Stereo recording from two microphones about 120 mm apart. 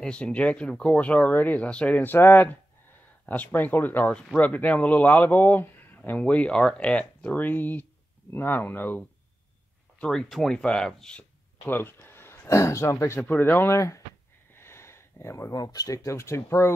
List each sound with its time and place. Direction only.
0.0 s speech: 10° left (ahead or behind)
9.9 s speech: 5° left (ahead or behind)
11.6 s speech: 15° left (ahead or behind)